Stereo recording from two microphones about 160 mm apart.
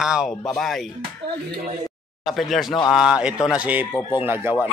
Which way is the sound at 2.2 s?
Centre (ahead or behind).